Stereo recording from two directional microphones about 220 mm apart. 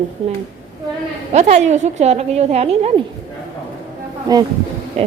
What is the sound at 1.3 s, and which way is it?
A woman's voice, 30° right (ahead or behind).